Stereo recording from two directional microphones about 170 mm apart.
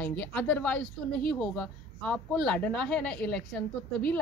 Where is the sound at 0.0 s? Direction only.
10° left (ahead or behind).